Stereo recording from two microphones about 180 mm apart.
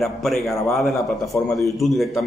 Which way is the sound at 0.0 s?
Centre (ahead or behind).